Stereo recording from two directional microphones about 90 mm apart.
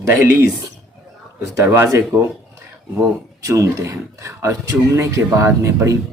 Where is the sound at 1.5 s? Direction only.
30° right (ahead or behind).